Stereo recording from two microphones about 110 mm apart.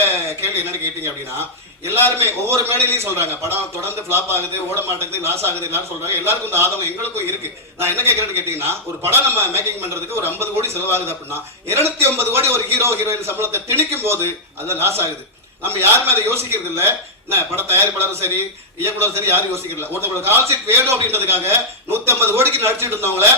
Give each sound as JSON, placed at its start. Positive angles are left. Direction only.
{"t": 2.0, "sound": "a man's voice", "side_deg": -20}
{"t": 7.8, "sound": "a man's voice", "side_deg": -20}